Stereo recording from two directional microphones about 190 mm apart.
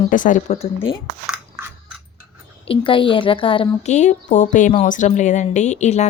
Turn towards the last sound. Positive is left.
turn(degrees=35)  # may be behind; listen again after turning